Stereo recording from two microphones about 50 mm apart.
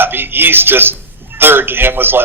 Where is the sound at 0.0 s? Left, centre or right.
Right.